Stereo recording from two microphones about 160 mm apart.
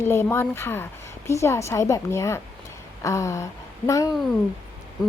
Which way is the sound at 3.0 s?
20° left (ahead or behind).